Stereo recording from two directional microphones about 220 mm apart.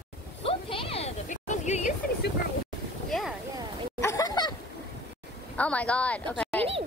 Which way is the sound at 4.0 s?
15° left (ahead or behind).